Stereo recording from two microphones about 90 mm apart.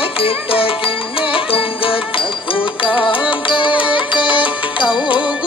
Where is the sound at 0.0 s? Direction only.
90° left.